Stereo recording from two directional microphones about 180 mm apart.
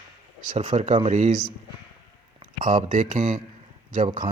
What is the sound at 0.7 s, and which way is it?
Speech, 40° right (ahead or behind).